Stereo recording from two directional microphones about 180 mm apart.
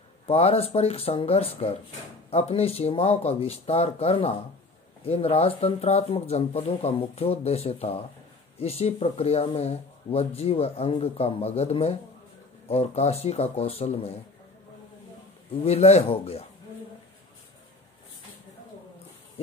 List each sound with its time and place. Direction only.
0.3 s speech: 35° left (ahead or behind)
15.6 s speech: 35° left (ahead or behind)